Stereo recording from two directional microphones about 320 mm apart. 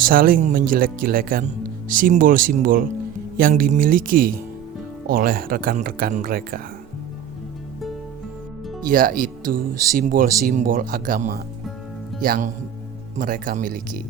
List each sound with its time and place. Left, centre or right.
0.0 s speech: right
8.9 s speech: right